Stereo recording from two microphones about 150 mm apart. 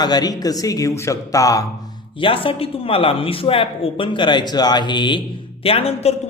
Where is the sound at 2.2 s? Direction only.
35° left (ahead or behind).